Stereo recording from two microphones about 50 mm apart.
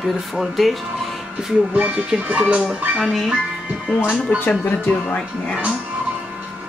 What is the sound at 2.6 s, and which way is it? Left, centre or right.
Speech, centre.